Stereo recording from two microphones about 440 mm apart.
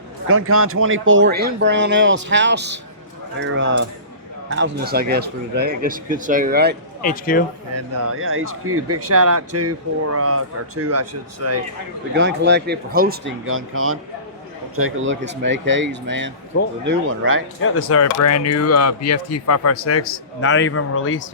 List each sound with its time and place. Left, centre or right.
0.3 s speech: right
7.0 s speech: centre
7.7 s speech: right
17.6 s speech: left